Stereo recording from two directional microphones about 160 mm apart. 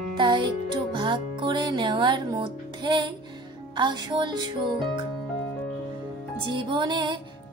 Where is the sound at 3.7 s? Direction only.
30° right (ahead or behind).